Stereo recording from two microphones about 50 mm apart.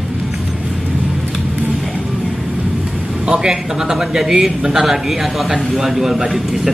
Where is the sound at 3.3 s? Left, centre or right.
Centre.